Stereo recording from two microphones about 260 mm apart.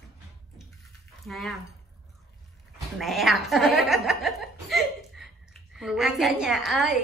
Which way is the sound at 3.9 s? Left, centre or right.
Centre.